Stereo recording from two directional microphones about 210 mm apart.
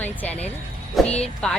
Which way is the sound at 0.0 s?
10° left (ahead or behind).